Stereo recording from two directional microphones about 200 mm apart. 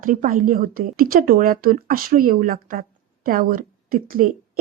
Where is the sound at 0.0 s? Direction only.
40° right (ahead or behind).